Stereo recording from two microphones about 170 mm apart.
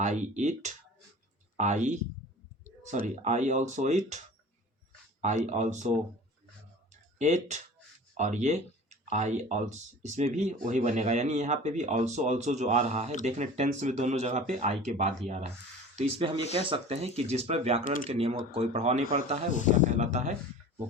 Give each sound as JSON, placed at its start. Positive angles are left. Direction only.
{"t": 0.0, "sound": "speech", "side_deg": -45}
{"t": 3.2, "sound": "speech", "side_deg": -45}
{"t": 5.5, "sound": "speech", "side_deg": -45}
{"t": 7.2, "sound": "speech", "side_deg": -45}